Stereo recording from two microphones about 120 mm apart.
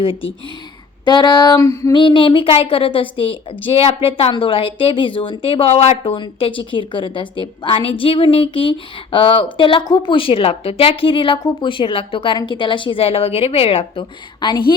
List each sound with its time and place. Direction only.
0.0 s a woman's voice: 50° left (ahead or behind)
1.0 s a sound: 40° left (ahead or behind)
1.6 s female singing: 30° left (ahead or behind)
1.9 s a woman's voice: 45° left (ahead or behind)
6.0 s a woman's voice: 45° left (ahead or behind)
14.4 s a sound: 40° left (ahead or behind)